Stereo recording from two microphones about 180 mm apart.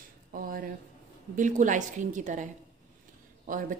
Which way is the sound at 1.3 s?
45° right (ahead or behind).